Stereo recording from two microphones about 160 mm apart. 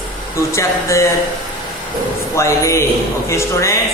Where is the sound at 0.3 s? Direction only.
20° left (ahead or behind).